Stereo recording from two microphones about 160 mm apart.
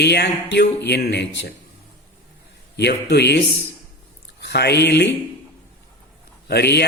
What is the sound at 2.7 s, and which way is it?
Speech, 90° left.